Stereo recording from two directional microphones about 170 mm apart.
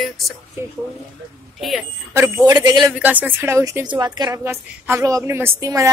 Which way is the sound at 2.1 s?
15° right (ahead or behind).